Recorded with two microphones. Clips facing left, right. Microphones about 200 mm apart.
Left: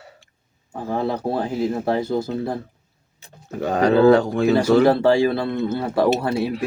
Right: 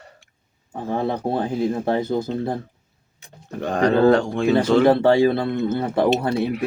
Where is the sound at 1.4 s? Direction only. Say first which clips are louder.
Right 1 dB; 25° left (ahead or behind).